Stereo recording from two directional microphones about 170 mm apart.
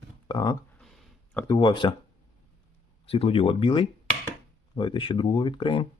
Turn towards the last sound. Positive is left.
turn(degrees=30)  # may be behind; listen again after turning